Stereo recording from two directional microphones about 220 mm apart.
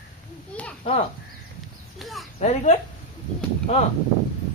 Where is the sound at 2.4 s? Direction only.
30° left (ahead or behind).